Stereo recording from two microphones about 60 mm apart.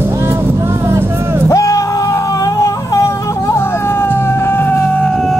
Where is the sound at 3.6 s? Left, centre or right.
Left.